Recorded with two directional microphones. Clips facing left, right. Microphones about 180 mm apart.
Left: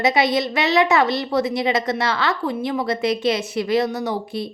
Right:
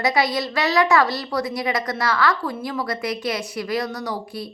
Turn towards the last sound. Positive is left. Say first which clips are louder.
# left 4 dB
turn(degrees=25)  # may be behind; listen again after turning